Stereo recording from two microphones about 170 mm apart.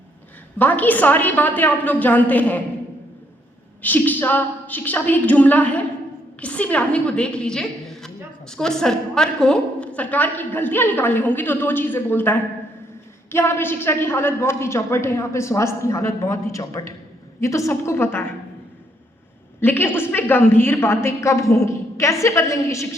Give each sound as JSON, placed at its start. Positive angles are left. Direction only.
{"t": 0.6, "sound": "a woman's voice", "side_deg": 10}
{"t": 3.8, "sound": "a woman's voice", "side_deg": 10}
{"t": 19.5, "sound": "a woman's voice", "side_deg": 15}